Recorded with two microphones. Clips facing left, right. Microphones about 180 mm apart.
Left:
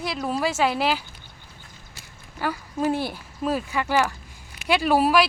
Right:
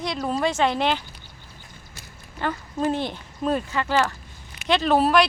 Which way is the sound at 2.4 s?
10° left (ahead or behind).